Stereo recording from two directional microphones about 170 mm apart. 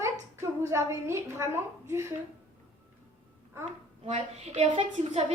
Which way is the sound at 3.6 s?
40° right (ahead or behind).